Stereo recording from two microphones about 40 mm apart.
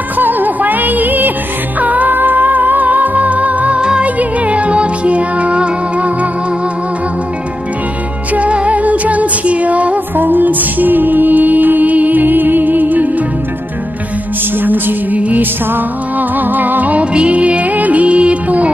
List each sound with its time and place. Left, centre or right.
0.2 s music: right
8.4 s music: right
10.1 s music: right
14.6 s music: right
15.1 s music: right
15.7 s music: right
17.0 s music: right
18.0 s music: right